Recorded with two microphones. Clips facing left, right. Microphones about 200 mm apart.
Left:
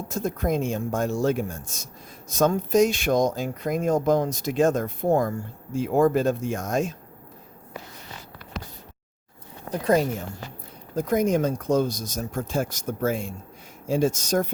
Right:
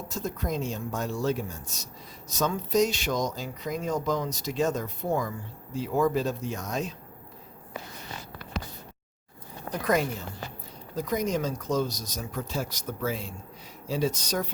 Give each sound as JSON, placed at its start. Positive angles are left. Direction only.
{"t": 0.1, "sound": "speech", "side_deg": 50}
{"t": 9.7, "sound": "a woman's voice", "side_deg": 30}
{"t": 10.9, "sound": "speech", "side_deg": 50}